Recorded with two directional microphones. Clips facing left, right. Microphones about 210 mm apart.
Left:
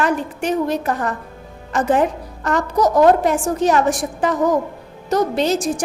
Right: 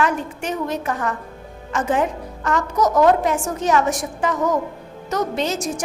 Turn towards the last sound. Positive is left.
turn(degrees=30)  # may be behind; listen again after turning